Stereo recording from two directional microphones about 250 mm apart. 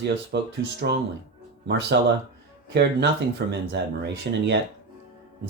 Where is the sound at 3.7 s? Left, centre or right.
Right.